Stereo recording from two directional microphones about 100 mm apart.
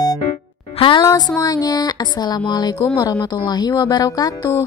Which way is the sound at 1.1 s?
45° left (ahead or behind).